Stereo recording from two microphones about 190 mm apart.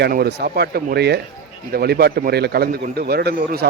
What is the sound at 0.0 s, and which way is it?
Speech, 60° right (ahead or behind).